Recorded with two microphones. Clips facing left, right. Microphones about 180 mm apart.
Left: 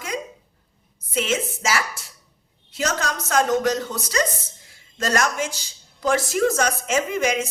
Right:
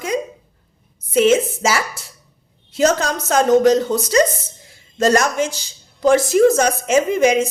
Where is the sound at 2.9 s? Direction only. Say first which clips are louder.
Right 7 dB; 25° right (ahead or behind).